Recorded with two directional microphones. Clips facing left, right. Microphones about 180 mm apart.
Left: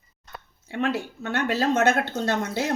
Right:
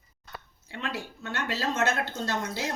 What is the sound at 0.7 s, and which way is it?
A woman's voice, 55° left (ahead or behind).